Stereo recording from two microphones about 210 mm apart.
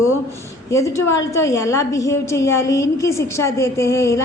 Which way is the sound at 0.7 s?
15° left (ahead or behind).